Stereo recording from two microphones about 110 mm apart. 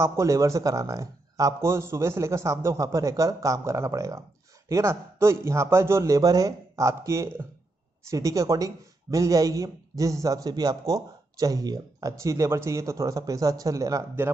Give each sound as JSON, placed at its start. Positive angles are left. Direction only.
{"t": 0.0, "sound": "speech", "side_deg": -25}